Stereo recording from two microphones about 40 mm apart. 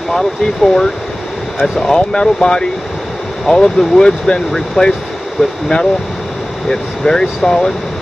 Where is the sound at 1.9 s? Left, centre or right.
Left.